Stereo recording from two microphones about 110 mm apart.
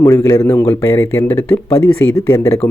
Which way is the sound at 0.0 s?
30° left (ahead or behind).